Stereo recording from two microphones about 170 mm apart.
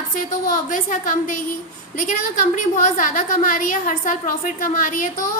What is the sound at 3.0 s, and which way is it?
A woman's voice, 50° left (ahead or behind).